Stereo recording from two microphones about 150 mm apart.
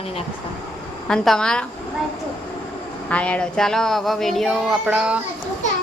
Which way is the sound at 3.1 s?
10° left (ahead or behind).